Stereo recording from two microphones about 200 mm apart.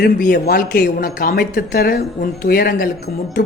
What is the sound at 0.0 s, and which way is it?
Speech, 45° left (ahead or behind).